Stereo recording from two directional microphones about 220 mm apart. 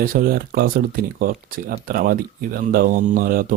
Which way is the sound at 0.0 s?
40° right (ahead or behind).